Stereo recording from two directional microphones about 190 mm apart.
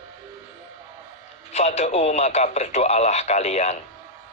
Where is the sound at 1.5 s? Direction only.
35° left (ahead or behind).